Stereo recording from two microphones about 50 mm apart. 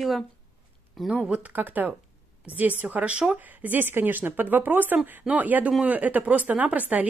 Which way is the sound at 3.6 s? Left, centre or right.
Right.